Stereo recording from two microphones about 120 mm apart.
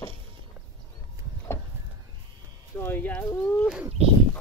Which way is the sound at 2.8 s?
20° left (ahead or behind).